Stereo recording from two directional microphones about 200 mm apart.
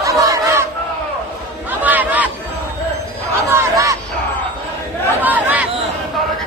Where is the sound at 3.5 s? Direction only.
15° right (ahead or behind).